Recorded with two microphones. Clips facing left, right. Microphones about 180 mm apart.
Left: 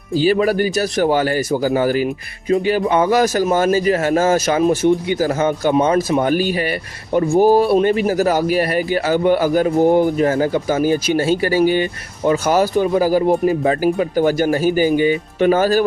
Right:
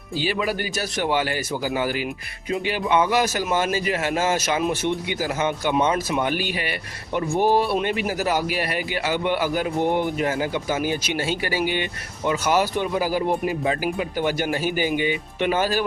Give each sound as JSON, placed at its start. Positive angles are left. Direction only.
{"t": 0.2, "sound": "a man's voice", "side_deg": 45}